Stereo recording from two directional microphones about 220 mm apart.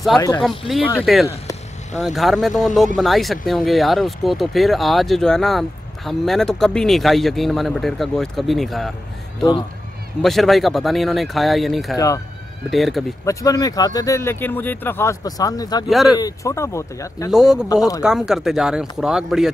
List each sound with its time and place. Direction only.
0.4 s speech: centre (ahead or behind)
10.2 s speech: centre (ahead or behind)
13.2 s speech: 15° left (ahead or behind)
15.9 s speech: centre (ahead or behind)
16.2 s speech: 15° left (ahead or behind)
17.3 s speech: centre (ahead or behind)